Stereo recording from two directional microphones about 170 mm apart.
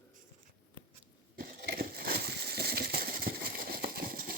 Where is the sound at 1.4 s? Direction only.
65° right (ahead or behind).